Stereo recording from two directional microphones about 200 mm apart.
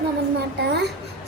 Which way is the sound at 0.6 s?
55° right (ahead or behind).